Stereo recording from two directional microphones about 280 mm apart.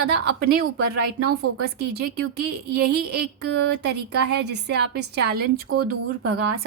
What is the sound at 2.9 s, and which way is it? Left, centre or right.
A woman's voice, right.